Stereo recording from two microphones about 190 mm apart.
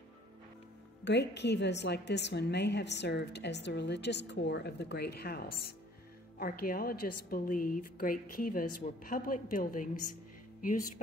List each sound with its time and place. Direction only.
1.0 s a woman's voice: 65° left (ahead or behind); by 10.9 s 45° left (ahead or behind)